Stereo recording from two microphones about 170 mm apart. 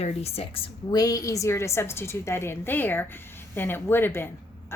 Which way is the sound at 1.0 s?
20° left (ahead or behind).